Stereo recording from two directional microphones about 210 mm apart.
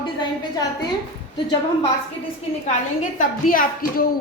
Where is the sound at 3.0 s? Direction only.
40° left (ahead or behind).